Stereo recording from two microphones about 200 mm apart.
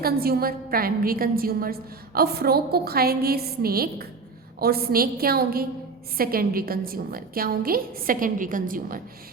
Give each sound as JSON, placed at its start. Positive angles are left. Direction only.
{"t": 0.0, "sound": "a woman's voice", "side_deg": -50}